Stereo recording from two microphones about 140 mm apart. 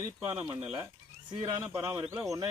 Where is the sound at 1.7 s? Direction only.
20° right (ahead or behind).